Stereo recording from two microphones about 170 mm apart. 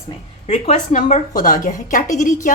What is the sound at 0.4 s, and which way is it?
A woman's voice, 40° left (ahead or behind).